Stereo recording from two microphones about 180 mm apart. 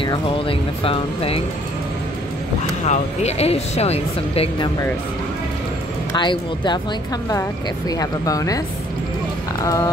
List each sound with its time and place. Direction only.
0.0 s speech: 30° left (ahead or behind)
2.8 s speech: 40° left (ahead or behind)
6.1 s speech: 25° left (ahead or behind)
7.9 s speech: 20° left (ahead or behind)